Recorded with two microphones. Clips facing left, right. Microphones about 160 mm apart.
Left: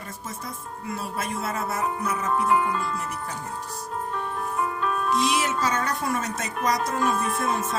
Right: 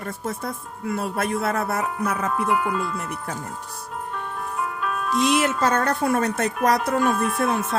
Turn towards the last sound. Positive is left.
turn(degrees=0)  # may be behind; listen again after turning